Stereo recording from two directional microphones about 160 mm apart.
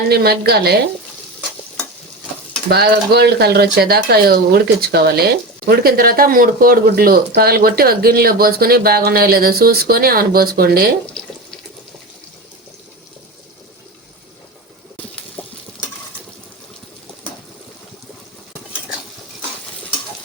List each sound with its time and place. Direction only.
0.1 s speech: 75° right (ahead or behind)
2.6 s speech: 80° right
5.6 s speech: 70° right (ahead or behind)
15.4 s stir: 10° left (ahead or behind)